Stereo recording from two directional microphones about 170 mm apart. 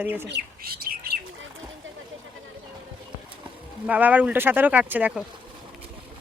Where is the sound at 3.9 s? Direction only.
10° right (ahead or behind).